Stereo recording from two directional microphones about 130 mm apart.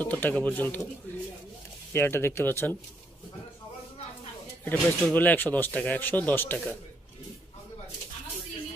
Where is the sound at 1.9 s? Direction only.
20° left (ahead or behind).